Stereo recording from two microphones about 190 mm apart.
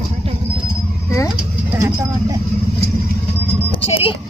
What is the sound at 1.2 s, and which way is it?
Vehicle, 10° right (ahead or behind).